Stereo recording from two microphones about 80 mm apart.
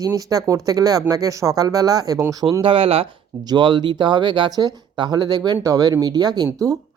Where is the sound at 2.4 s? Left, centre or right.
Right.